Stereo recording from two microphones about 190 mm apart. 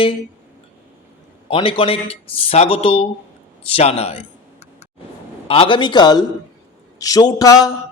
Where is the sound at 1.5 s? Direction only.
30° left (ahead or behind).